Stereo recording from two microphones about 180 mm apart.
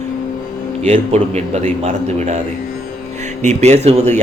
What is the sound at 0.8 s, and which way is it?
A man's voice, 35° right (ahead or behind).